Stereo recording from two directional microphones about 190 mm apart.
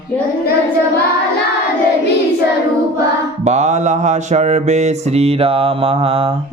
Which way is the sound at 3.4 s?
35° right (ahead or behind).